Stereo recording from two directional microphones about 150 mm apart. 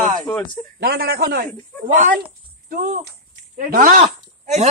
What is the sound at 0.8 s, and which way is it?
Speech, 90° right.